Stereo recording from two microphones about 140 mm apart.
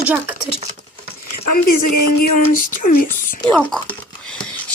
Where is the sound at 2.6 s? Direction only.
75° left (ahead or behind).